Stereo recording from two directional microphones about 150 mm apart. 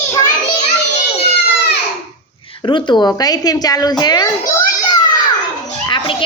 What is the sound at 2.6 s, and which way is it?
A woman's voice, 30° left (ahead or behind).